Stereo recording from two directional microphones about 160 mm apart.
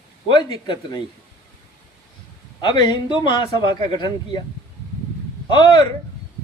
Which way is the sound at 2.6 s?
25° left (ahead or behind).